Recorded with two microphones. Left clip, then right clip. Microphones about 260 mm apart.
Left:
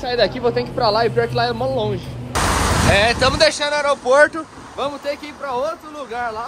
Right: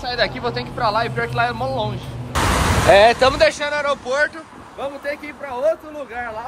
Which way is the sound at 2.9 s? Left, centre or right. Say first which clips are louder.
Right 5 dB; centre.